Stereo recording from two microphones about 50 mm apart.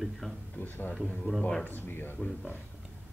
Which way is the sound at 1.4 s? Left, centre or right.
Centre.